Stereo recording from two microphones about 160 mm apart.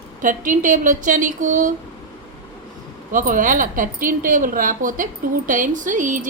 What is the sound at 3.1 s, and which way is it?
Speech, 55° right (ahead or behind).